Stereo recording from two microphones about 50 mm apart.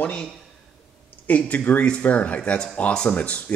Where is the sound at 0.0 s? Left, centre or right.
Left.